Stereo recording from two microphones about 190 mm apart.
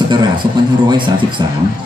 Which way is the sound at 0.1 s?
25° right (ahead or behind).